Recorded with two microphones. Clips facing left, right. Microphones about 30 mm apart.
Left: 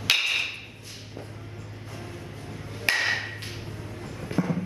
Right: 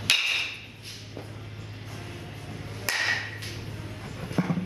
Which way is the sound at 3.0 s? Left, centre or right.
Centre.